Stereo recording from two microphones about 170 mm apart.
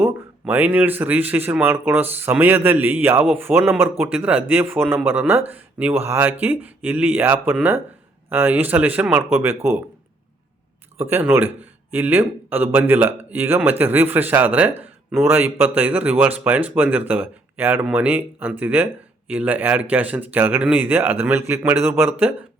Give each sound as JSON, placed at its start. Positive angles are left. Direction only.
{"t": 0.0, "sound": "a man's voice", "side_deg": -10}
{"t": 10.9, "sound": "a man's voice", "side_deg": -10}